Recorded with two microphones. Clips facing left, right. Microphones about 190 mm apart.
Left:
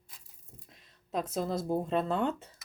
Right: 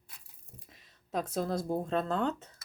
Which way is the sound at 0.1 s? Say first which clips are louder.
Right 1 dB; 65° right (ahead or behind).